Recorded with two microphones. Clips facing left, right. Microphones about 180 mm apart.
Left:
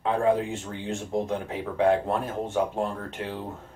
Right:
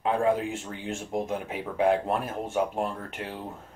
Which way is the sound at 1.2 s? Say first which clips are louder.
Left 2 dB; 15° right (ahead or behind).